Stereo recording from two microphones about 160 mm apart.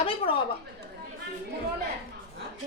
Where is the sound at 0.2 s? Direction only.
35° left (ahead or behind).